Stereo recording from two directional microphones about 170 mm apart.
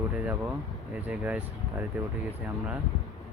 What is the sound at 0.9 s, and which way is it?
Speech, 10° right (ahead or behind).